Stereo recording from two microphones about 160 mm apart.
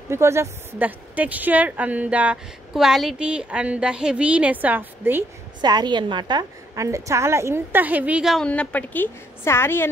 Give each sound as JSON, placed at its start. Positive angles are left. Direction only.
{"t": 0.1, "sound": "a woman's voice", "side_deg": -15}
{"t": 5.6, "sound": "a woman's voice", "side_deg": -25}
{"t": 8.5, "sound": "a woman's voice", "side_deg": 10}